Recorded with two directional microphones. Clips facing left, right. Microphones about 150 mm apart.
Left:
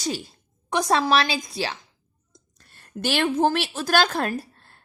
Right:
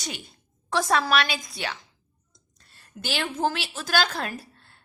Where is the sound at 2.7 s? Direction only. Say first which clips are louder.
Left 6 dB; 55° left (ahead or behind).